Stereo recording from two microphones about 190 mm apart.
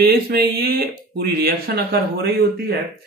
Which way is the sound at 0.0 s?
55° right (ahead or behind).